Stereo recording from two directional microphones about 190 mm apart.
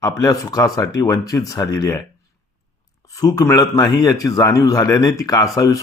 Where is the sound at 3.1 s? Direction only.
20° left (ahead or behind).